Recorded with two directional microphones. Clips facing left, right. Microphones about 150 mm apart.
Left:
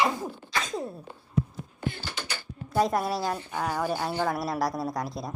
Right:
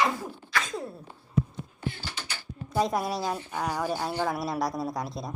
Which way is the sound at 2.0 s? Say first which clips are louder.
Left 3 dB; 55° left (ahead or behind).